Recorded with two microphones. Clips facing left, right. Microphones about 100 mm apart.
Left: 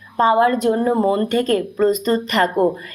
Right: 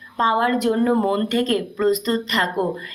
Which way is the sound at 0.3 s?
30° left (ahead or behind).